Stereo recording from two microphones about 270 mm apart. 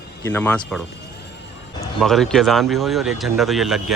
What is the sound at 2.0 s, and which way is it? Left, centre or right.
Speech, centre.